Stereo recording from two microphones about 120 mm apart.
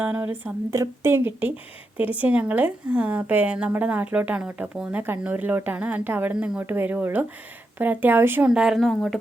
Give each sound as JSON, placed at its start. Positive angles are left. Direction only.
{"t": 0.0, "sound": "a woman's voice", "side_deg": -15}
{"t": 8.4, "sound": "speech", "side_deg": -5}